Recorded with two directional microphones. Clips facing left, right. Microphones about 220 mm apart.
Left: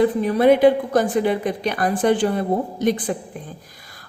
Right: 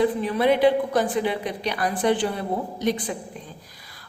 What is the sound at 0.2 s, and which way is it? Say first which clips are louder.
A woman's voice: left 5 dB; 45° left (ahead or behind).